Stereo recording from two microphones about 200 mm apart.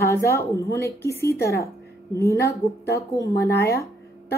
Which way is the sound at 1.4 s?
50° left (ahead or behind).